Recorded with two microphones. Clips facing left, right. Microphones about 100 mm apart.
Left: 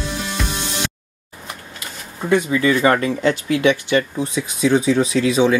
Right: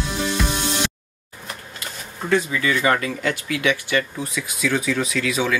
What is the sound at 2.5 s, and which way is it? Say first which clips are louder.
Speech: left 5 dB; 30° left (ahead or behind).